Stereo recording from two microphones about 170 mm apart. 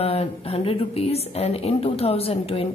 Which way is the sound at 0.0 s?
35° left (ahead or behind).